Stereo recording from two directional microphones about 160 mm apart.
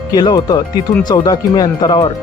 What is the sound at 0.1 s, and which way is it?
Speech, 25° left (ahead or behind).